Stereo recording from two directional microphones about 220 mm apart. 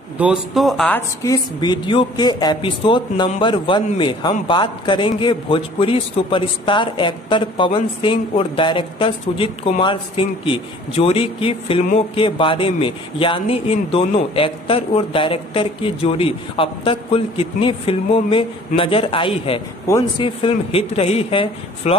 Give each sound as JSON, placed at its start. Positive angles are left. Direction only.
{"t": 0.2, "sound": "a man's voice", "side_deg": 0}
{"t": 19.9, "sound": "speech", "side_deg": 15}
{"t": 20.2, "sound": "a man's voice", "side_deg": 25}